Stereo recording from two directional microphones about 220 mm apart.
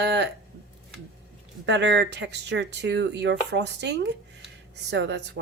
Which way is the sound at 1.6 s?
50° right (ahead or behind).